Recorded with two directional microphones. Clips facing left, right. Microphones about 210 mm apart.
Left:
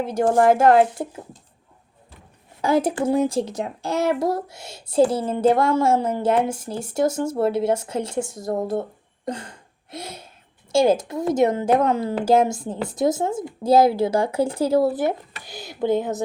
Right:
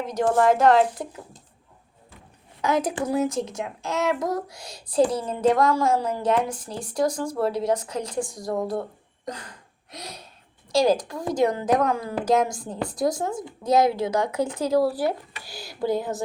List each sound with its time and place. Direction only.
0.0 s speech: 30° left (ahead or behind)
2.6 s speech: 30° left (ahead or behind)
8.7 s a sound: 25° left (ahead or behind)
10.7 s speech: 25° left (ahead or behind)